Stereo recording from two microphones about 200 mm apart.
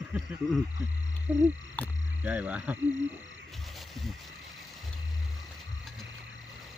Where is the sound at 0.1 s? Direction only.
5° right (ahead or behind).